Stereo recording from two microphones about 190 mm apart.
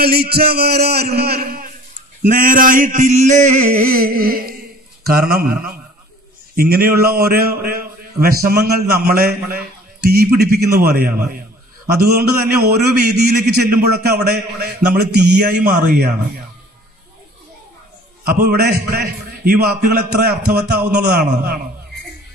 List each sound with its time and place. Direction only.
0.0 s a man's voice: 55° right (ahead or behind); by 3.7 s 35° right (ahead or behind)
3.7 s a man's voice: 50° right (ahead or behind)
18.2 s a man's voice: 55° right (ahead or behind)